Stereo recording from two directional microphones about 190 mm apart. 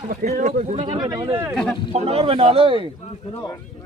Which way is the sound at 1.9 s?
30° right (ahead or behind).